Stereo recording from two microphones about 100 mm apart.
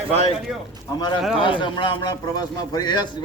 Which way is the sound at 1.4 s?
55° left (ahead or behind).